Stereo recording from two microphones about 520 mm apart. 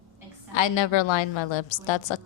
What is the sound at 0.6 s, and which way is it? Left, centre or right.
A woman's voice, left.